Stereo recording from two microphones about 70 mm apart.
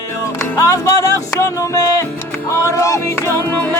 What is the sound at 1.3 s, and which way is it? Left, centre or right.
Music, left.